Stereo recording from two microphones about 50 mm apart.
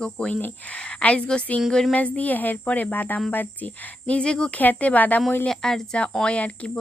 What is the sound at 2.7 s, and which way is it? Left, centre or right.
Speech, left.